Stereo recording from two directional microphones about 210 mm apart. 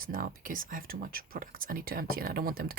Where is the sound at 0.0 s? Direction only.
40° right (ahead or behind).